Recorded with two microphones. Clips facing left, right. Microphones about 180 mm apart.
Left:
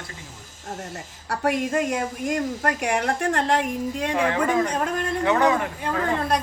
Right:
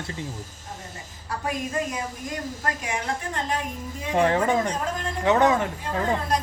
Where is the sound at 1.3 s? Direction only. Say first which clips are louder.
Left 6 dB; 70° left (ahead or behind).